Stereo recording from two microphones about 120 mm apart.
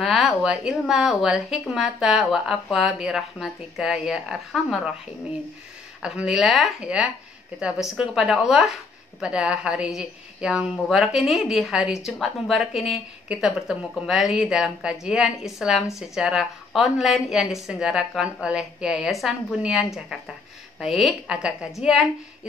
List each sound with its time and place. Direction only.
0.0 s a sound: centre (ahead or behind)
0.4 s a woman's voice: 5° right (ahead or behind)
6.0 s a woman's voice: 5° right (ahead or behind)